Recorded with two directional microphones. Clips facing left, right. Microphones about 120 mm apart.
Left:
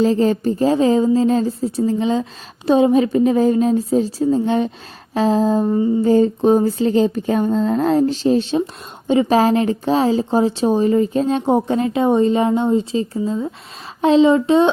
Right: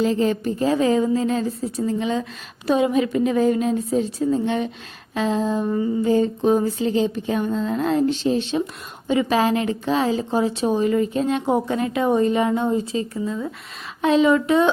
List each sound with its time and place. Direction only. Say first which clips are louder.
0.0 s speech: left 4 dB; 35° left (ahead or behind)